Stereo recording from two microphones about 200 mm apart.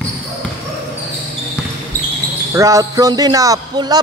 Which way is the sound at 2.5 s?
15° right (ahead or behind).